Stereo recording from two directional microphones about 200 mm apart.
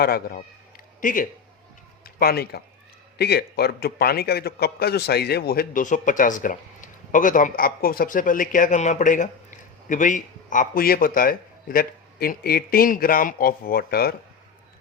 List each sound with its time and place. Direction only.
0.0 s a man's voice: 50° left (ahead or behind)